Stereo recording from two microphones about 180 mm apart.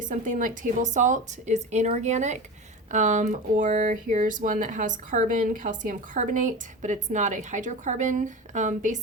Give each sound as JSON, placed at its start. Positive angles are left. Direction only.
{"t": 0.0, "sound": "a woman's voice", "side_deg": -45}